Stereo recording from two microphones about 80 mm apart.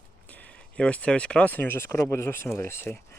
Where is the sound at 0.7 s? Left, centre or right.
Centre.